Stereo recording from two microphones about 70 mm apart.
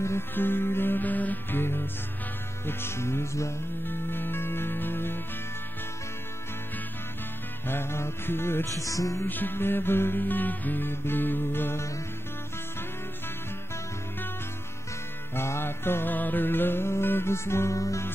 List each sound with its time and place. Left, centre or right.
0.0 s music: left
3.8 s music: left
7.6 s music: left
8.6 s music: left
9.2 s music: left
15.3 s music: left